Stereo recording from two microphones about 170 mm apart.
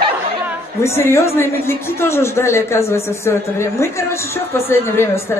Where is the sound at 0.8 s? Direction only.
15° left (ahead or behind).